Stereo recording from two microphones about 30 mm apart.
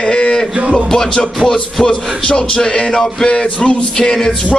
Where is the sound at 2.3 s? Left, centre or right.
Left.